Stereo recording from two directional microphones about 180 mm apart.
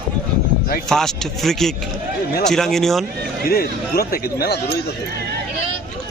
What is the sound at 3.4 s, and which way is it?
Speech, 60° left (ahead or behind).